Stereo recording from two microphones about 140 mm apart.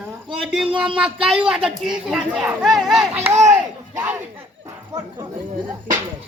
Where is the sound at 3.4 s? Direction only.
20° right (ahead or behind).